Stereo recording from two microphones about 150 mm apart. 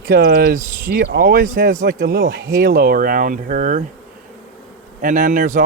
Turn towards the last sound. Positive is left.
turn(degrees=-60)  # may be behind; listen again after turning